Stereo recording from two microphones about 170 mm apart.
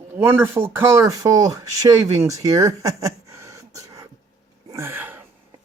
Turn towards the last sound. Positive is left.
turn(degrees=-10)  # may be behind; listen again after turning